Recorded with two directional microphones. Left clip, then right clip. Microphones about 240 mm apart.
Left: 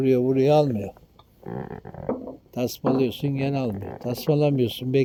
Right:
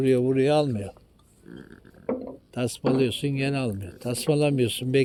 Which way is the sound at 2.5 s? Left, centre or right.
Centre.